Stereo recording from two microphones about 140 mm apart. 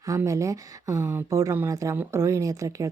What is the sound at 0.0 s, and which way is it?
Speech, 20° right (ahead or behind).